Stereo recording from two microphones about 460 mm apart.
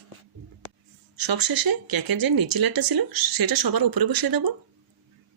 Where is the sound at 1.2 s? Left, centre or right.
Right.